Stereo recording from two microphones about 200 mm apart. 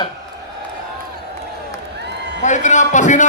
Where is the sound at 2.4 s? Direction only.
35° left (ahead or behind).